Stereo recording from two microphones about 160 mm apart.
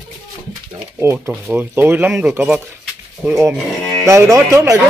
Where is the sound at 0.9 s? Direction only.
15° right (ahead or behind).